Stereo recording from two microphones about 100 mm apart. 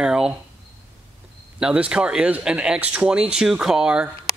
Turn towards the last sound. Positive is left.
turn(degrees=-5)  # may be behind; listen again after turning